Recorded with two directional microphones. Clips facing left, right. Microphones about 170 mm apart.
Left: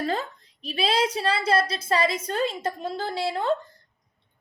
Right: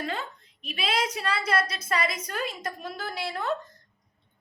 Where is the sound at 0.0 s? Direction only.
35° left (ahead or behind).